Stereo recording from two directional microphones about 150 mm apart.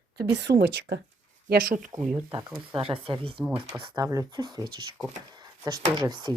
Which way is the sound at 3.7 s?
25° right (ahead or behind).